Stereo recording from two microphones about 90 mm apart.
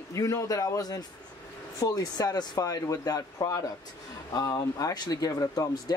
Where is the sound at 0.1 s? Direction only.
35° left (ahead or behind).